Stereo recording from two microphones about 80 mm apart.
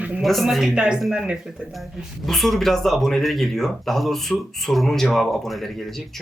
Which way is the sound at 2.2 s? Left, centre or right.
Centre.